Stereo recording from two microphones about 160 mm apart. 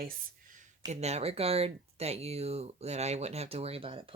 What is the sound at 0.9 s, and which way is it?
Speech, 45° right (ahead or behind).